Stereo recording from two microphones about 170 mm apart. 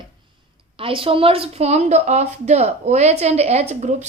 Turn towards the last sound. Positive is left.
turn(degrees=-40)  # may be behind; listen again after turning